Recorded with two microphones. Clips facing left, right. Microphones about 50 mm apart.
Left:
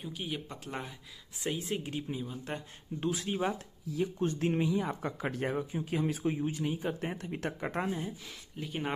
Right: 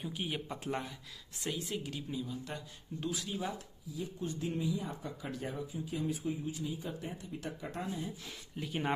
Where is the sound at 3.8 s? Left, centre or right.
Left.